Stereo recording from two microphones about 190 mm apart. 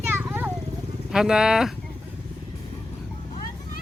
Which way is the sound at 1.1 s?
5° right (ahead or behind).